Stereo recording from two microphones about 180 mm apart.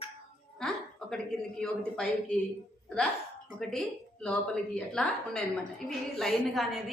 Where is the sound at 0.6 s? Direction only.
5° left (ahead or behind).